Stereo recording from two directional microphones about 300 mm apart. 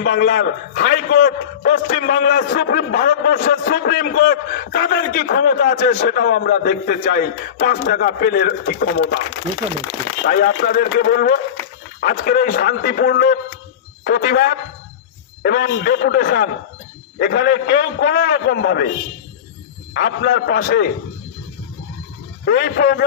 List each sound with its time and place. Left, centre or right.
0.0 s a man's voice: left
10.2 s a man's voice: left
19.9 s a man's voice: left
22.4 s a man's voice: left